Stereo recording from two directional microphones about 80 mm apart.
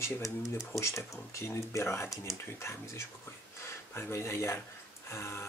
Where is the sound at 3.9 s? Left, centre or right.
Left.